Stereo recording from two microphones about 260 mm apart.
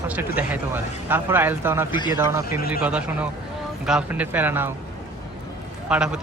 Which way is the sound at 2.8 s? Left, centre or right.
Centre.